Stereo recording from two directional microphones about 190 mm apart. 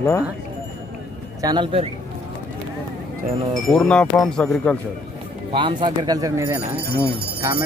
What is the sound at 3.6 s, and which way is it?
Speech, centre (ahead or behind).